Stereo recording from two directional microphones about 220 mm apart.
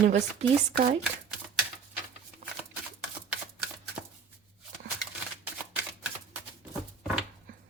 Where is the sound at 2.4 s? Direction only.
40° right (ahead or behind).